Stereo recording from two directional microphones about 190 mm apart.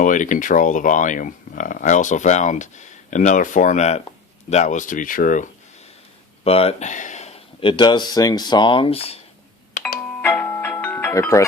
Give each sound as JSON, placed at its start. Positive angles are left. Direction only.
{"t": 0.0, "sound": "speech", "side_deg": 40}
{"t": 6.4, "sound": "speech", "side_deg": 30}
{"t": 10.2, "sound": "music", "side_deg": 10}